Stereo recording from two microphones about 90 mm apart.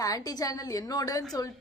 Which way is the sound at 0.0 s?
40° left (ahead or behind).